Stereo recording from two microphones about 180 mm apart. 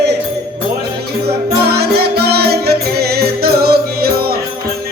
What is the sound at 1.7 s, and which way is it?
Music, 60° right (ahead or behind).